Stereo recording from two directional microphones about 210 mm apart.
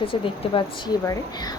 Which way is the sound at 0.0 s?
25° left (ahead or behind).